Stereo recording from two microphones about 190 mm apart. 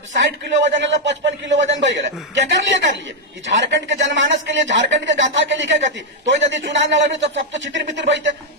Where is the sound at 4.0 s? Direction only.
75° right (ahead or behind).